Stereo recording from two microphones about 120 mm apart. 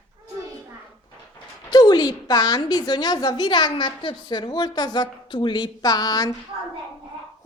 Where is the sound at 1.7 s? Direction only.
35° left (ahead or behind).